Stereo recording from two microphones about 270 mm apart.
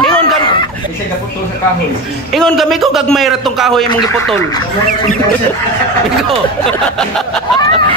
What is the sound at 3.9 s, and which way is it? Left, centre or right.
Speech, centre.